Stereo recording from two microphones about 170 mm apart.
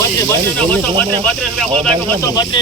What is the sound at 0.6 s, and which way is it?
Speech, 5° left (ahead or behind).